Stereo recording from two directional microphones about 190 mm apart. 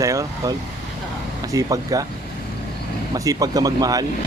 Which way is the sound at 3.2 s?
20° right (ahead or behind).